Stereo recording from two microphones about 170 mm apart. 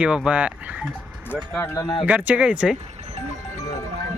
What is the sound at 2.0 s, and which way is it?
Speech, 10° right (ahead or behind).